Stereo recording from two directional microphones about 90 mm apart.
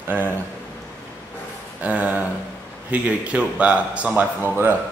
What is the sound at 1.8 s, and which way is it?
A man's voice, 15° right (ahead or behind).